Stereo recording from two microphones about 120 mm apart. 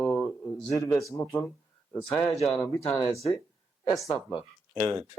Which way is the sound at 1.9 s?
25° left (ahead or behind).